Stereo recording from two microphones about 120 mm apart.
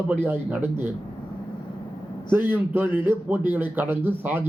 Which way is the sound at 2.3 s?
15° right (ahead or behind).